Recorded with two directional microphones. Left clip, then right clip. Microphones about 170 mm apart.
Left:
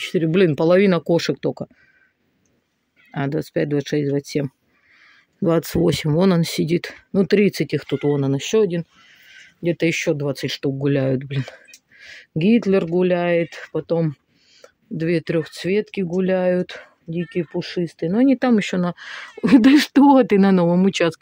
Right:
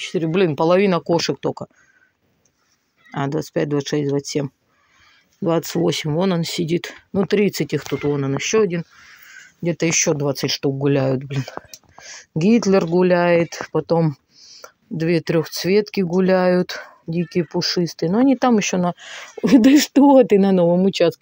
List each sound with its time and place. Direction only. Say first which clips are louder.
0.0 s speech: left 1 dB; 45° left (ahead or behind); by 1.7 s 25° left (ahead or behind)
3.1 s speech: right 1 dB; 25° left (ahead or behind)
5.4 s speech: left 1 dB; 35° left (ahead or behind)
8.7 s speech: even; 20° left (ahead or behind); by 18.1 s centre (ahead or behind)
18.1 s speech: right 1 dB; 15° left (ahead or behind); by 21.2 s 35° left (ahead or behind)